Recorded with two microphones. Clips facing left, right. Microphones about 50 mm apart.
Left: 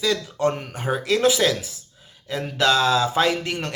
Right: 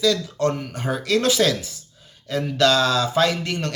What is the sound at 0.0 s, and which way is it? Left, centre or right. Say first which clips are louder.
Speech: right 1 dB; left.